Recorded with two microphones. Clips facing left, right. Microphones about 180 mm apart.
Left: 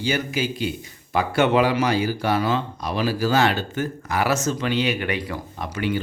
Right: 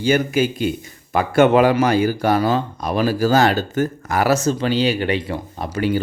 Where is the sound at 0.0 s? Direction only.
50° right (ahead or behind).